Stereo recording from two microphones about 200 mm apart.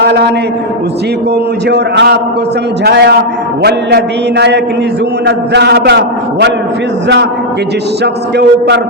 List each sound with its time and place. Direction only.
1.7 s a man's voice: 55° right (ahead or behind)
8.0 s a man's voice: 55° right (ahead or behind)